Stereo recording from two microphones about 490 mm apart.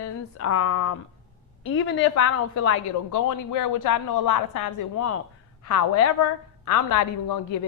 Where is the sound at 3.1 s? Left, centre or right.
Left.